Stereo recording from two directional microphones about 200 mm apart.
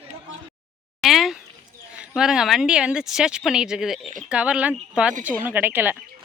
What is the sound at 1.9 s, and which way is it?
Speech, 5° right (ahead or behind).